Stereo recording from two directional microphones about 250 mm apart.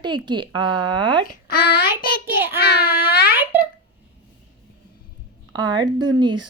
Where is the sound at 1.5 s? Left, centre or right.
Left.